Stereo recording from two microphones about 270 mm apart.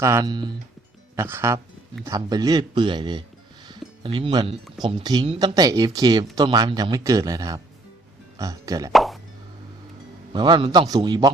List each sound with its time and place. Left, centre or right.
0.0 s speech: centre
8.9 s plop: centre
10.3 s speech: centre